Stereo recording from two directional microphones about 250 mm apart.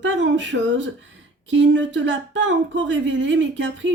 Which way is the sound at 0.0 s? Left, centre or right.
Right.